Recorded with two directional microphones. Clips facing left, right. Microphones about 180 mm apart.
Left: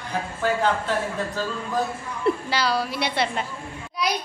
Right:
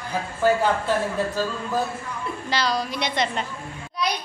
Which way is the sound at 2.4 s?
10° left (ahead or behind).